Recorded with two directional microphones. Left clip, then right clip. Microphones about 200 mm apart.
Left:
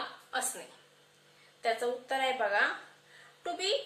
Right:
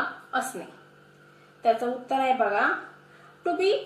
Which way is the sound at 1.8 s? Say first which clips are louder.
Right 6 dB; 25° left (ahead or behind).